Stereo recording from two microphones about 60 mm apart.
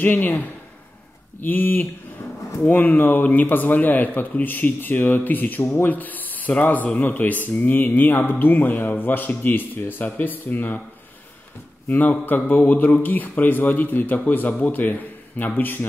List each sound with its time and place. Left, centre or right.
0.0 s speech: left
1.4 s speech: left
11.9 s speech: left